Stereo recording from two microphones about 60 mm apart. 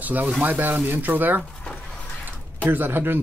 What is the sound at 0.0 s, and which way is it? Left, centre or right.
Speech, right.